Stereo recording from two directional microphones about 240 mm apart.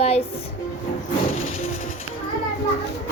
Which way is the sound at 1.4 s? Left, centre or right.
Left.